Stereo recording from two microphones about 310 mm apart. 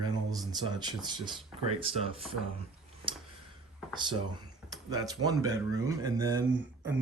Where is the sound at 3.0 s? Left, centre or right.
Centre.